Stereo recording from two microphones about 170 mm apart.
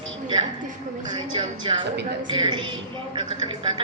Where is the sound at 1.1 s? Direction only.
30° right (ahead or behind).